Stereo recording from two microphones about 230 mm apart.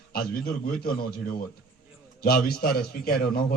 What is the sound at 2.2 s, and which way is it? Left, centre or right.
A man's voice, left.